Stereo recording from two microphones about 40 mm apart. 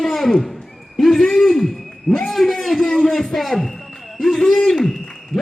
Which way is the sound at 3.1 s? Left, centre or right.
Centre.